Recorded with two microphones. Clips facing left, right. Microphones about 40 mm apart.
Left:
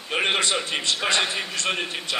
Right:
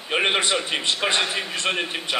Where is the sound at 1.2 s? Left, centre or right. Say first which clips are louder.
Right 1 dB; centre.